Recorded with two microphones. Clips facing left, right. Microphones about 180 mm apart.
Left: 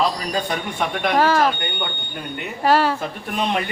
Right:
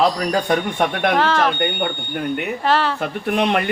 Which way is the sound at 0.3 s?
50° right (ahead or behind).